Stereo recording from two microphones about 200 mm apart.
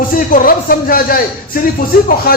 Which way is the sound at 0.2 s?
45° left (ahead or behind).